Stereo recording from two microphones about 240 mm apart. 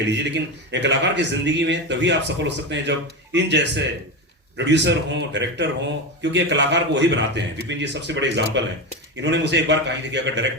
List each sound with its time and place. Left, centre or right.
0.1 s speech: right